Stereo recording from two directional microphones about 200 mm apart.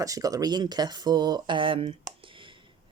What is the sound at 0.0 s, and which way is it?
Speech, 15° right (ahead or behind).